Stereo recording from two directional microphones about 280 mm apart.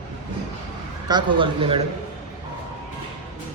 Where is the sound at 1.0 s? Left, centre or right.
Centre.